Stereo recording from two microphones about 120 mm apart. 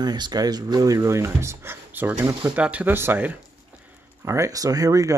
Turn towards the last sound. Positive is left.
turn(degrees=-30)  # may be behind; listen again after turning